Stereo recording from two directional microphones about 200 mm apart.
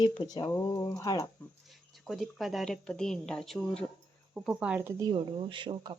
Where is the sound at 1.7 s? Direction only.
Centre (ahead or behind).